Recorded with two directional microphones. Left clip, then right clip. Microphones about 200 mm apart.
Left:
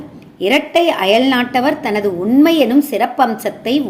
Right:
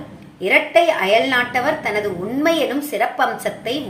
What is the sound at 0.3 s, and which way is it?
A woman's voice, 50° left (ahead or behind).